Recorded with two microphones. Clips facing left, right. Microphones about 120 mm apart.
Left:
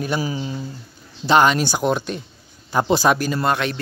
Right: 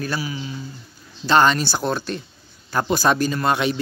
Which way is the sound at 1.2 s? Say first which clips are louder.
Left 1 dB; 10° left (ahead or behind).